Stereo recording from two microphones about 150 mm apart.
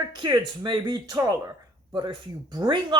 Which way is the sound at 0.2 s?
30° right (ahead or behind).